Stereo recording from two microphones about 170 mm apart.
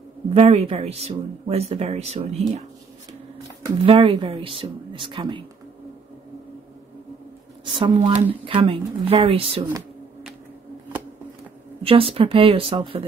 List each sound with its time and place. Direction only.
0.3 s speech: 35° right (ahead or behind)
3.6 s speech: 30° right (ahead or behind)
7.6 s speech: 30° right (ahead or behind)
11.8 s speech: 35° right (ahead or behind)